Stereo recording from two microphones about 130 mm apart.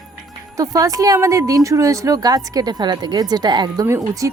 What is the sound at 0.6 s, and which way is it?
A woman's voice, 25° right (ahead or behind).